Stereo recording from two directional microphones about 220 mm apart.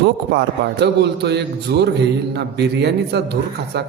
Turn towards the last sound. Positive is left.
turn(degrees=-50)  # may be behind; listen again after turning